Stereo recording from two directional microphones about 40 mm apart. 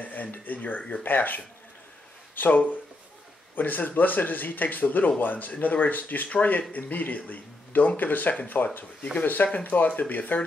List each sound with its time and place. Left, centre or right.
0.0 s speech: left